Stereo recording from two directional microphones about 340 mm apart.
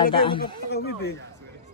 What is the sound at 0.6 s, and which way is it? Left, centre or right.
Speech, left.